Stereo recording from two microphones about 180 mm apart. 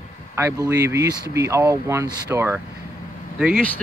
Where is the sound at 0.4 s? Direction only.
15° right (ahead or behind).